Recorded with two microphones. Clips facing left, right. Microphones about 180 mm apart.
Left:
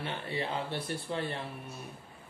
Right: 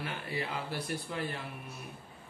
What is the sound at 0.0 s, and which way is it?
Speech, 30° left (ahead or behind).